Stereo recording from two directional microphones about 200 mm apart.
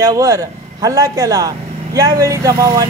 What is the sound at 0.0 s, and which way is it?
Speech, 15° right (ahead or behind).